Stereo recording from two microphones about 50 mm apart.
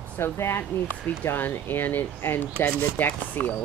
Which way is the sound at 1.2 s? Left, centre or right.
Left.